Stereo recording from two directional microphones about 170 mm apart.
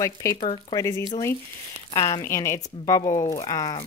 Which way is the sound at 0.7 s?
15° left (ahead or behind).